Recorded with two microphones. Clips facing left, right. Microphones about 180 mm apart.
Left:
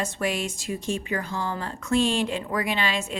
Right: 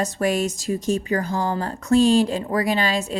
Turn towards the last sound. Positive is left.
turn(degrees=-35)  # may be behind; listen again after turning